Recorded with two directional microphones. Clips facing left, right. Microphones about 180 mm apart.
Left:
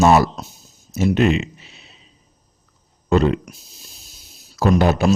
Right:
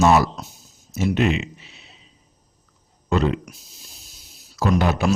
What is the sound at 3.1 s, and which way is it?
A man's voice, 40° left (ahead or behind).